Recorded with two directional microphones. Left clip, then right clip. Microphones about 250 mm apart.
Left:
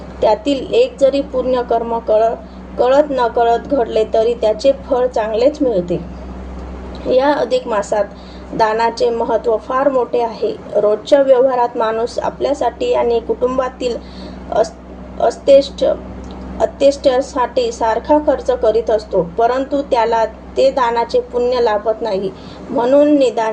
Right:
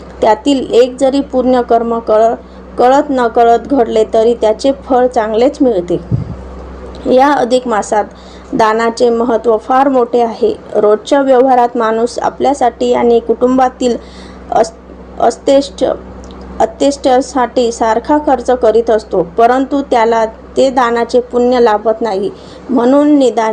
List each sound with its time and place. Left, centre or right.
0.2 s a woman's voice: right
7.1 s a woman's voice: right
15.2 s a woman's voice: right